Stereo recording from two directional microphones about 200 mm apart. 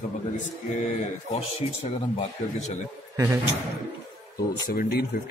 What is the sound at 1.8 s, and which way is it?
Speech, 30° left (ahead or behind).